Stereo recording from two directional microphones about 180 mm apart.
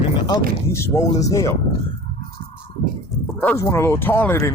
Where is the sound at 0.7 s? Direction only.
15° left (ahead or behind).